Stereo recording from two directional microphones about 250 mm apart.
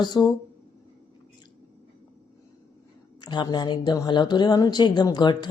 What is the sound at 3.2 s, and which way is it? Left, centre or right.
Speech, centre.